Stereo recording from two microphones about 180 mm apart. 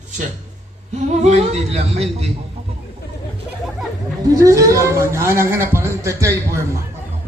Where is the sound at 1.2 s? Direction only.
40° right (ahead or behind).